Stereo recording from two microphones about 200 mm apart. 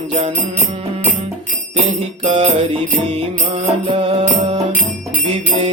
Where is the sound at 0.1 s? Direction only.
25° right (ahead or behind).